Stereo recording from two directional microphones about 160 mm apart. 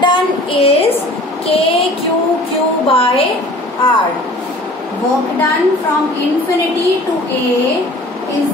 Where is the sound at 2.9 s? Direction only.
35° left (ahead or behind).